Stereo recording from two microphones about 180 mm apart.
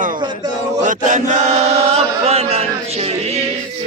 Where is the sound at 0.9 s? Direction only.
45° right (ahead or behind).